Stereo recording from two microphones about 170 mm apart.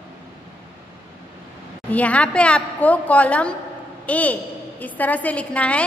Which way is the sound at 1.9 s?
10° left (ahead or behind).